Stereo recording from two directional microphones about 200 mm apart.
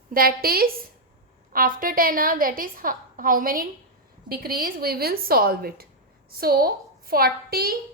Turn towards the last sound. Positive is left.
turn(degrees=-50)  # may be behind; listen again after turning